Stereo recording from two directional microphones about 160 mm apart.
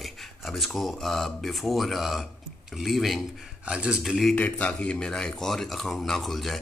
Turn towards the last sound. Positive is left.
turn(degrees=0)  # may be behind; listen again after turning